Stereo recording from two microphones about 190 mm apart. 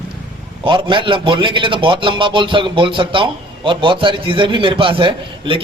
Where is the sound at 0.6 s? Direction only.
25° right (ahead or behind).